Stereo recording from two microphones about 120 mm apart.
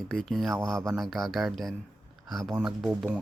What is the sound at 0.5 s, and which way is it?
Speech, 25° right (ahead or behind).